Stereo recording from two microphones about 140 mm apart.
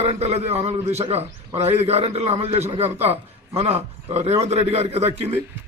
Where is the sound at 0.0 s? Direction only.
50° right (ahead or behind).